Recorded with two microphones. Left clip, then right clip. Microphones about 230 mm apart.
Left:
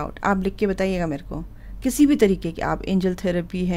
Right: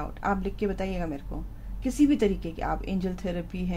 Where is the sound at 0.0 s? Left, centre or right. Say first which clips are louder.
Left 6 dB; left.